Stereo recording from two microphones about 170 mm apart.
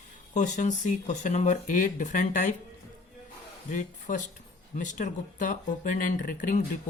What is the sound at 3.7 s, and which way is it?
Speech, 45° left (ahead or behind).